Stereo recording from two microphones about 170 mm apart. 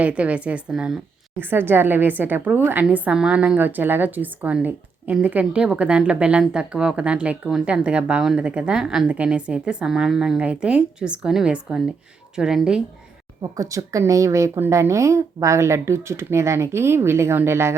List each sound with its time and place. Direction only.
0.0 s a woman's voice: 10° right (ahead or behind)
13.4 s a woman's voice: 20° right (ahead or behind)